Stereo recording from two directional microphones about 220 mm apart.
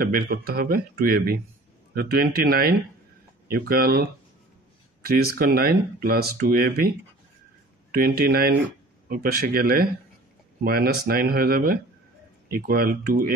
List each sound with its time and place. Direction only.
0.0 s speech: 40° right (ahead or behind)
5.0 s speech: 45° right (ahead or behind)
7.9 s speech: 40° right (ahead or behind)